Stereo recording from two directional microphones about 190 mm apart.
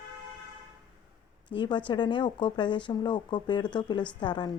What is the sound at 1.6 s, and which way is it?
Speech, 25° left (ahead or behind).